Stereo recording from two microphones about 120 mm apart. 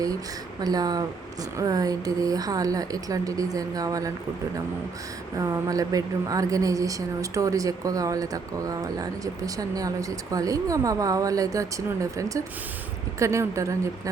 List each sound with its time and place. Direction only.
0.6 s speech: 30° right (ahead or behind)
5.4 s speech: 30° right (ahead or behind)